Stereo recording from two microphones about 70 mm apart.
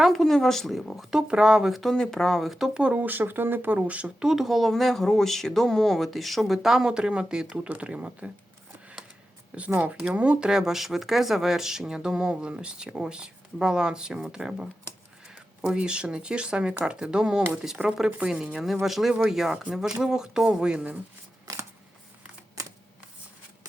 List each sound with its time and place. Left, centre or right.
0.0 s speech: centre
1.8 s speech: centre
2.8 s speech: right
4.3 s speech: centre
9.5 s speech: centre